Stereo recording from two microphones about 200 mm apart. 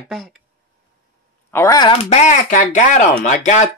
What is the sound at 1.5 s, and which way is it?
Speech, 15° left (ahead or behind).